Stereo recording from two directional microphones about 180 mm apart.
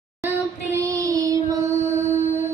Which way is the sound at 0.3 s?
15° right (ahead or behind).